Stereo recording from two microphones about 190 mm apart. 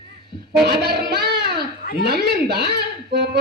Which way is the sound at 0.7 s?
60° right (ahead or behind).